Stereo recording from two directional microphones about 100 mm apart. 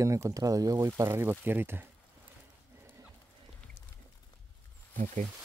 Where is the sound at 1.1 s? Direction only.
20° right (ahead or behind).